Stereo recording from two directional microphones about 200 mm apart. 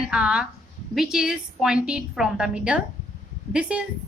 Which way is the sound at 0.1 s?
5° right (ahead or behind).